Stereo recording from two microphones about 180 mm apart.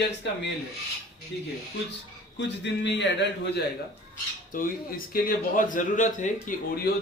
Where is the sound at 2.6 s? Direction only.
75° left (ahead or behind).